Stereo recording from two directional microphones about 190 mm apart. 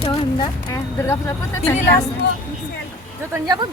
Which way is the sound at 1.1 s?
15° left (ahead or behind).